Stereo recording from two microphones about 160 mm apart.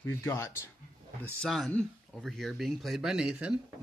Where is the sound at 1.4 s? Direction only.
5° left (ahead or behind).